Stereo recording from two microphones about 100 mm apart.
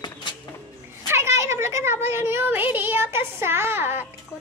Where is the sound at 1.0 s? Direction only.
25° right (ahead or behind).